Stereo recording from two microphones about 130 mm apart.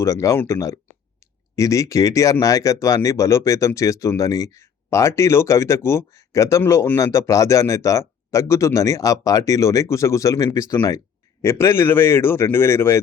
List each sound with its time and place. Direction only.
0.0 s speech: 25° left (ahead or behind)